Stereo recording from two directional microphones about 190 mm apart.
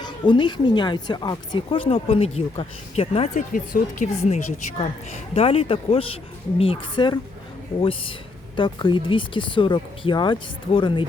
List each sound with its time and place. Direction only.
0.0 s speech: 25° left (ahead or behind)
3.5 s a woman's voice: 45° left (ahead or behind); by 11.0 s 25° left (ahead or behind)